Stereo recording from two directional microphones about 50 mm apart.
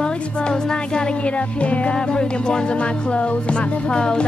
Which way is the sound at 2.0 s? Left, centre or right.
Centre.